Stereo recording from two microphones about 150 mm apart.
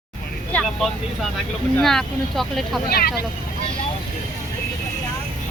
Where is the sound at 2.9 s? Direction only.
90° left.